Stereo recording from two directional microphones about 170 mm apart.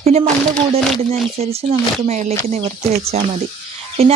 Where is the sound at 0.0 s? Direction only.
40° right (ahead or behind).